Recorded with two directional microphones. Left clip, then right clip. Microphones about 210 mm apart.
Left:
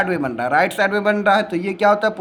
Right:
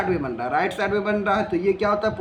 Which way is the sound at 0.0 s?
55° left (ahead or behind).